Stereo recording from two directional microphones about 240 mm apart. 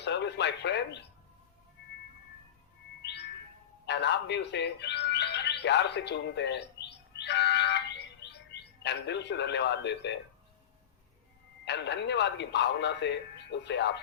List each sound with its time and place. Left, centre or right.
0.0 s speech: left
3.0 s music: left
11.6 s speech: left